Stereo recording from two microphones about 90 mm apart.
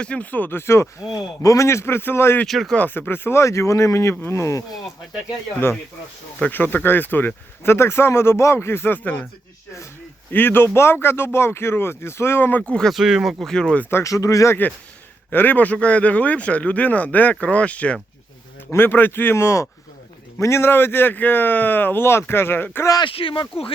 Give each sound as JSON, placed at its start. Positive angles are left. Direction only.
{"t": 0.0, "sound": "speech", "side_deg": 15}
{"t": 2.5, "sound": "speech", "side_deg": 0}
{"t": 2.7, "sound": "speech", "side_deg": 20}
{"t": 6.4, "sound": "speech", "side_deg": 20}
{"t": 10.3, "sound": "speech", "side_deg": 25}
{"t": 12.9, "sound": "speech", "side_deg": -5}
{"t": 13.5, "sound": "speech", "side_deg": 10}
{"t": 13.9, "sound": "speech", "side_deg": 35}
{"t": 15.3, "sound": "speech", "side_deg": 20}
{"t": 23.0, "sound": "speech", "side_deg": 80}